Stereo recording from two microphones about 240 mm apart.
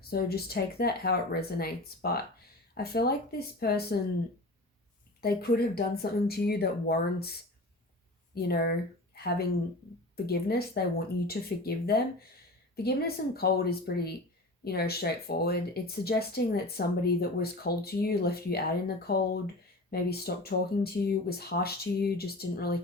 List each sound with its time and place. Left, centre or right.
0.0 s speech: left
5.2 s speech: left
8.4 s speech: left
10.2 s speech: left